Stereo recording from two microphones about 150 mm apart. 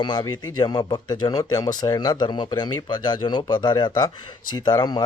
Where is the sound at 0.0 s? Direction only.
30° left (ahead or behind).